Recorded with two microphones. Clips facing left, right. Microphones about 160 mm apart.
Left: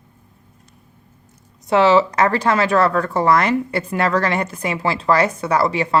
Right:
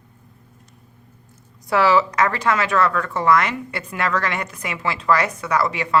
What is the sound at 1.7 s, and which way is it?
Speech, 25° left (ahead or behind).